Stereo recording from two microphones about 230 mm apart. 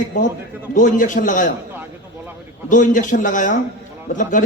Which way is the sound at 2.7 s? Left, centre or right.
Left.